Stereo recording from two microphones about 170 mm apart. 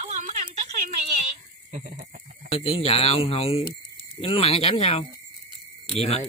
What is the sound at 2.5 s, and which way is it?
Speech, 35° left (ahead or behind).